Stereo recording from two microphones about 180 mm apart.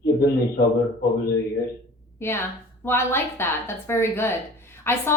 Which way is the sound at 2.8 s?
15° left (ahead or behind).